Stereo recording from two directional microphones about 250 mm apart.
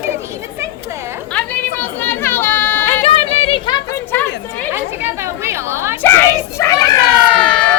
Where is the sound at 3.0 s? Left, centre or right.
Left.